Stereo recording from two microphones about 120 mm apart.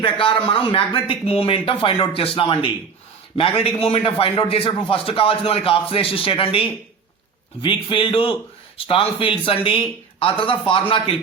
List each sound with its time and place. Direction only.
0.0 s a man's voice: 45° left (ahead or behind)